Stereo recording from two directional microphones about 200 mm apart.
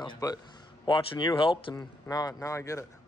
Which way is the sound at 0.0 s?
20° left (ahead or behind).